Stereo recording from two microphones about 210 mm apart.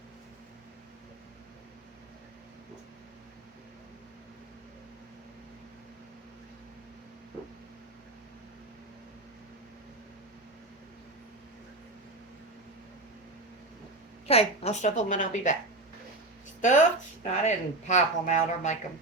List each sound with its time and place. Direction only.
14.3 s speech: 30° left (ahead or behind)
16.6 s speech: 35° left (ahead or behind)